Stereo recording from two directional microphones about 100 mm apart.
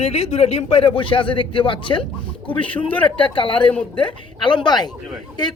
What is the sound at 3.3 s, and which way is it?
A woman's voice, 55° left (ahead or behind).